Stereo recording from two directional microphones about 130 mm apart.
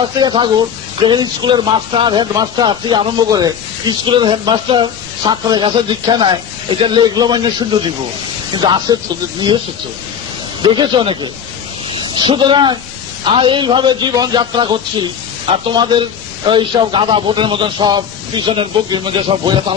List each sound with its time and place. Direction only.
0.2 s speech: 40° right (ahead or behind)
10.6 s speech: 35° right (ahead or behind)